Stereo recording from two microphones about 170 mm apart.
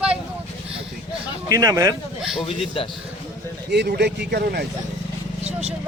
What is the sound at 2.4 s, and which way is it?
Speech, 35° left (ahead or behind).